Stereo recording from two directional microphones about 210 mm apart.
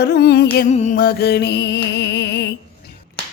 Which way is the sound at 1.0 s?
45° left (ahead or behind).